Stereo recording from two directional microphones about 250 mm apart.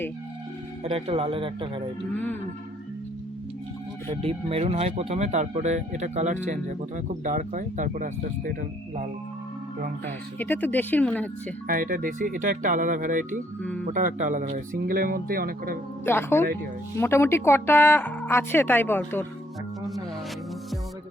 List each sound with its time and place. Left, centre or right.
0.9 s speech: right
2.1 s a woman's voice: centre
4.1 s speech: right
10.3 s a woman's voice: centre
11.7 s speech: right
13.6 s speech: centre
13.8 s speech: right
16.0 s a woman's voice: centre